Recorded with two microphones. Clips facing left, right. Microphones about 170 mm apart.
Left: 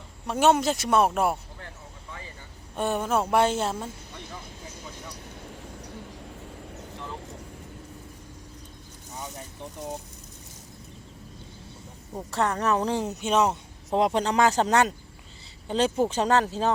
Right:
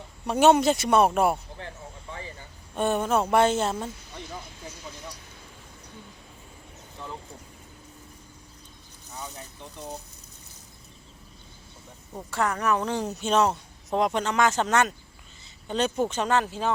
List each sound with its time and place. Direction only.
0.3 s speech: centre (ahead or behind)
2.7 s speech: 5° left (ahead or behind)
12.3 s speech: 35° left (ahead or behind)
13.1 s speech: 15° left (ahead or behind); by 16.5 s 35° left (ahead or behind)